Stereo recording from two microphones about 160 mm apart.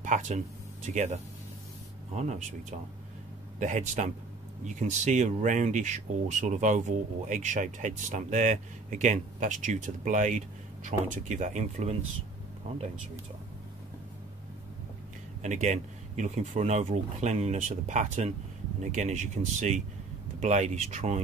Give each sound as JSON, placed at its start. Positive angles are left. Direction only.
{"t": 0.0, "sound": "speech", "side_deg": -50}
{"t": 3.5, "sound": "speech", "side_deg": -50}
{"t": 15.4, "sound": "speech", "side_deg": -50}